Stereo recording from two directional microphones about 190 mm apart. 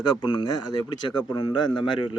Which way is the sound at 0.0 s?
20° left (ahead or behind).